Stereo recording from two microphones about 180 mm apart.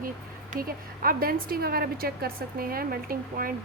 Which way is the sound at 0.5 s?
55° right (ahead or behind).